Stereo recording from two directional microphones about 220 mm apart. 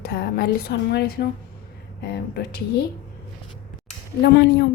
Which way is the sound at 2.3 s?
50° left (ahead or behind).